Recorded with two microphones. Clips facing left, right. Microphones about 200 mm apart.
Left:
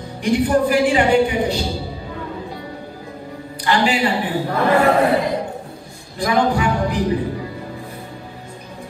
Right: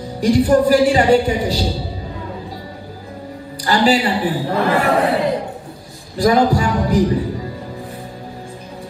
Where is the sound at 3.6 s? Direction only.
35° right (ahead or behind).